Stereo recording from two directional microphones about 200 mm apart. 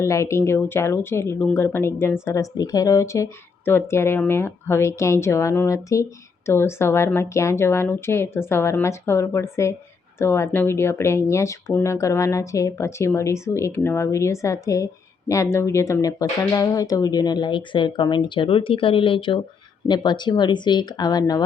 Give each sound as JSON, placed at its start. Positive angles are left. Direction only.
{"t": 0.0, "sound": "a woman's voice", "side_deg": 15}